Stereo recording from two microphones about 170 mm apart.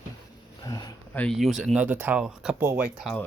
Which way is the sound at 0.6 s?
25° left (ahead or behind).